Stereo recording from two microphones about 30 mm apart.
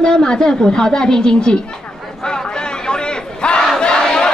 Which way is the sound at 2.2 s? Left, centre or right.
Left.